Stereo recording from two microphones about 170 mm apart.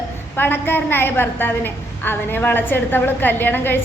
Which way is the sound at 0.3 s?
10° left (ahead or behind).